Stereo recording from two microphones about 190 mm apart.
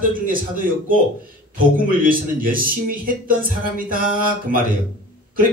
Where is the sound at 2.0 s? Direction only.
50° right (ahead or behind).